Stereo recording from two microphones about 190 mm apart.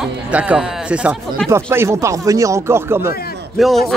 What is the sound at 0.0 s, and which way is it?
Speech, 5° right (ahead or behind).